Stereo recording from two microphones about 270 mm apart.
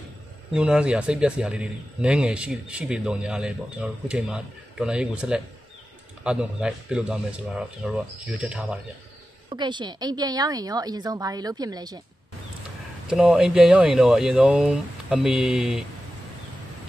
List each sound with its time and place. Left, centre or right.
0.5 s speech: centre
9.5 s a woman's voice: centre
13.1 s speech: centre